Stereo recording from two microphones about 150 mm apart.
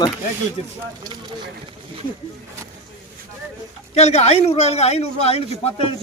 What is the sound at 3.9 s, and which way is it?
A man's voice, 45° left (ahead or behind).